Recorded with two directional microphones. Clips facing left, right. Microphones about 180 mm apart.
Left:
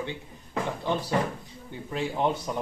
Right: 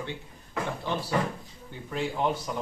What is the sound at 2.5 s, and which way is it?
Speech, 25° left (ahead or behind).